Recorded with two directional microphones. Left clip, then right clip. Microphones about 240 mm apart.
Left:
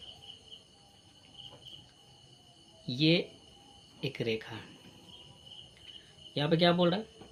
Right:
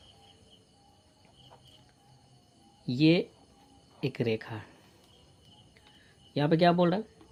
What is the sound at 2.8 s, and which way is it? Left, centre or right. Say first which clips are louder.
Speech: right 3 dB; right.